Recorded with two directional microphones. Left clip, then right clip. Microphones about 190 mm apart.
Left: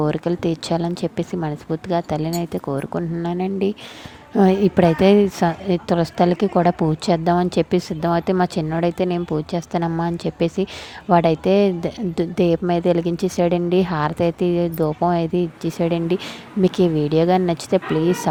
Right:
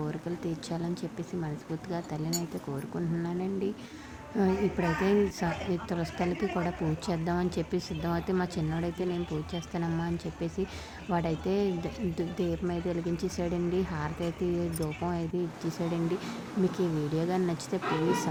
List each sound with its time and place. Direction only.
0.0 s a woman's voice: 40° left (ahead or behind)